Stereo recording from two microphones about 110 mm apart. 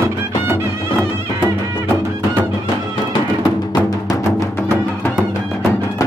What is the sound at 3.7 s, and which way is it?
Music, 35° left (ahead or behind).